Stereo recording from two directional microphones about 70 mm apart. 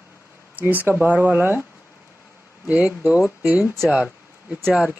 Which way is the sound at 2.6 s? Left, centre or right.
Right.